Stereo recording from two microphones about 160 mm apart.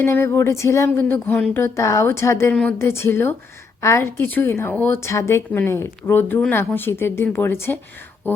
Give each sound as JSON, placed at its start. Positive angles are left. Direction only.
{"t": 0.0, "sound": "a woman's voice", "side_deg": 15}